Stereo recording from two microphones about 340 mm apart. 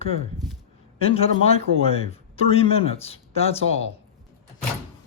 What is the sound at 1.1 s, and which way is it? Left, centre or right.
Speech, centre.